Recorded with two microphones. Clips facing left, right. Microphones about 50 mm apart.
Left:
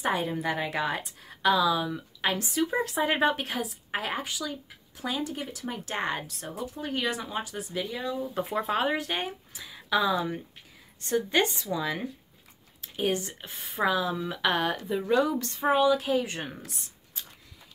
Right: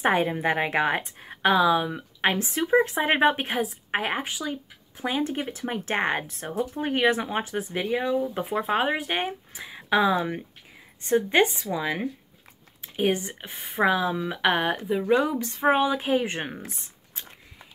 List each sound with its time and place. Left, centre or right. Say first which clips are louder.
0.0 s a woman's voice: right 5 dB; right
8.2 s a woman's voice: right 3 dB; right
15.6 s a woman's voice: right 1 dB; right